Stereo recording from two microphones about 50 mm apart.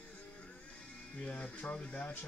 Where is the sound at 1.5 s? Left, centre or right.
Left.